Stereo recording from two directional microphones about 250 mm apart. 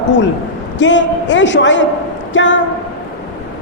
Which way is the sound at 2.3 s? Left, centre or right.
Left.